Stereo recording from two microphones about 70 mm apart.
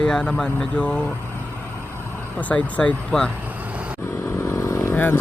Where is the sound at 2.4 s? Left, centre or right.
Centre.